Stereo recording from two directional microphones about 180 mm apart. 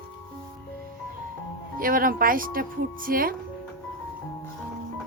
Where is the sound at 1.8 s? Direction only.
50° right (ahead or behind).